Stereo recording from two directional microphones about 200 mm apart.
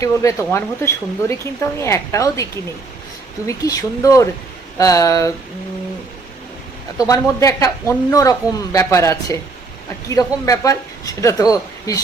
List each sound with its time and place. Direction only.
0.0 s speech: 15° left (ahead or behind)
7.1 s speech: 15° left (ahead or behind)